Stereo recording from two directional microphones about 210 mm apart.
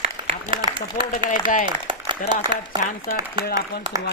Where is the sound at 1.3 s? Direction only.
40° left (ahead or behind).